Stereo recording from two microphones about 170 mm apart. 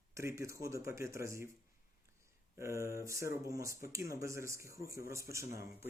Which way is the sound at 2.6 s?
15° right (ahead or behind).